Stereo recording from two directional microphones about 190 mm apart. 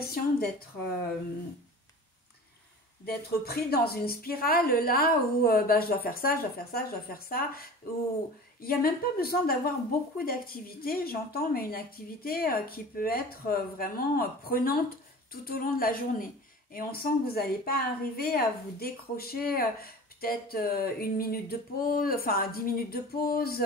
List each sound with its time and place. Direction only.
0.0 s speech: 55° left (ahead or behind)
3.1 s a woman's voice: 55° left (ahead or behind)